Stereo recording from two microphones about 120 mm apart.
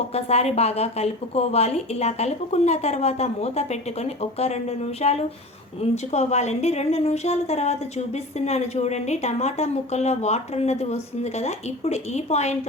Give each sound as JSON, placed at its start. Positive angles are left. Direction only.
{"t": 0.1, "sound": "a woman's voice", "side_deg": 60}